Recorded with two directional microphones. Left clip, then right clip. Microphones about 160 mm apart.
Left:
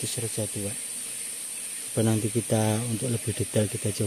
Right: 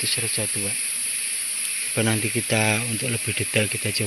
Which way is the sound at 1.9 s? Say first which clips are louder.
Right 2 dB; centre (ahead or behind).